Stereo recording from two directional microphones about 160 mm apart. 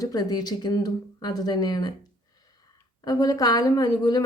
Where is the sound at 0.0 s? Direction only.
25° left (ahead or behind).